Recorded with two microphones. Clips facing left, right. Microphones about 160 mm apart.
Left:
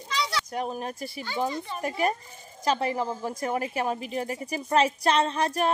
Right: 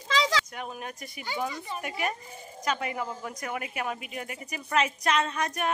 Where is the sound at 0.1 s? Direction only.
90° right.